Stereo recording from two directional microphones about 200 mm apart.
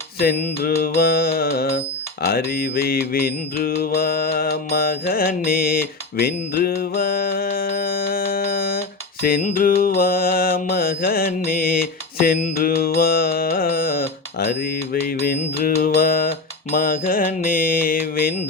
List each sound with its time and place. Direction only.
0.2 s mantra: 50° left (ahead or behind)
5.5 s music: 50° left (ahead or behind)
9.2 s mantra: 40° left (ahead or behind)
12.2 s carnatic music: 45° left (ahead or behind)
15.2 s mantra: 50° left (ahead or behind)